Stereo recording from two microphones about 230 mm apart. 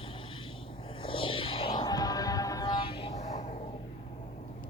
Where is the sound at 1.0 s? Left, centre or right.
Left.